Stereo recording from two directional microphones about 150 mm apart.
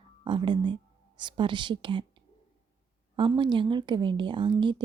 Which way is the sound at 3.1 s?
30° right (ahead or behind).